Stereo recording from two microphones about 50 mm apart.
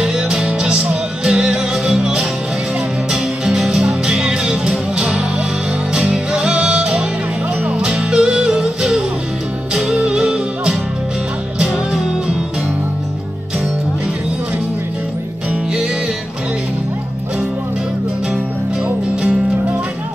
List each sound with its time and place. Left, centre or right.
0.0 s music: centre
9.8 s music: centre